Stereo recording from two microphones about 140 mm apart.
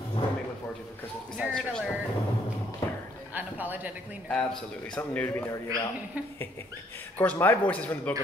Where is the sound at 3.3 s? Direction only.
10° right (ahead or behind).